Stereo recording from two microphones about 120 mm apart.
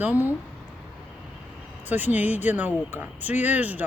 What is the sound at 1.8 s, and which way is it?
Speech, 15° right (ahead or behind).